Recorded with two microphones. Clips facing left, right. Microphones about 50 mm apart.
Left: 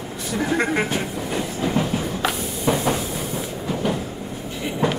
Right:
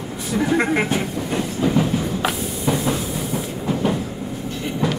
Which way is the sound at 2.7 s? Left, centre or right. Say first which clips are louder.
Even; left.